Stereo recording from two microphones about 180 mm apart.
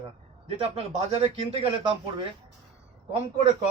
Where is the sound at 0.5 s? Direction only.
35° right (ahead or behind).